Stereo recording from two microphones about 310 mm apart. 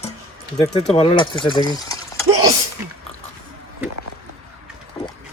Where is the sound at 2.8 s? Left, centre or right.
Centre.